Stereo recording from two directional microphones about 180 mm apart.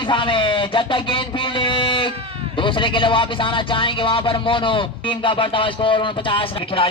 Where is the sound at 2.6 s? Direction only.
30° left (ahead or behind).